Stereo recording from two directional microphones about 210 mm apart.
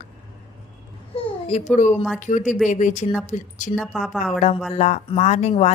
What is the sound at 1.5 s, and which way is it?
Speech, 35° left (ahead or behind).